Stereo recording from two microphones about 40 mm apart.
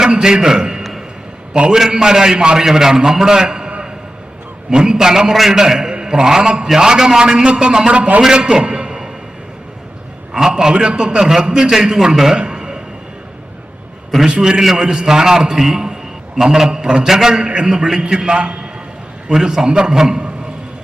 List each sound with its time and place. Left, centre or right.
0.0 s a man's voice: centre
0.8 s a sound: centre
1.7 s a man's voice: centre
4.7 s a man's voice: centre
8.2 s a man's voice: centre
10.3 s a man's voice: centre
12.4 s a sound: right
14.3 s a man's voice: right
14.6 s a man's voice: centre